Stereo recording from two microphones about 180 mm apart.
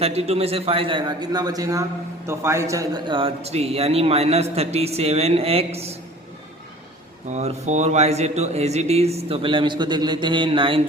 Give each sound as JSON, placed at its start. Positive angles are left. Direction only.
{"t": 0.0, "sound": "a man's voice", "side_deg": -35}
{"t": 7.3, "sound": "a man's voice", "side_deg": -40}